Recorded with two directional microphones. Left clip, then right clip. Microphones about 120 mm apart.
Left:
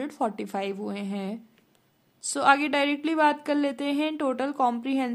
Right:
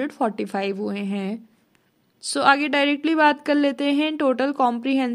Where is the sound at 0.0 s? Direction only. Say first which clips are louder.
Right 5 dB; 25° right (ahead or behind).